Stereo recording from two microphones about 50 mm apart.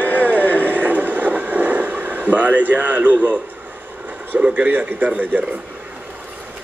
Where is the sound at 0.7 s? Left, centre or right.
Right.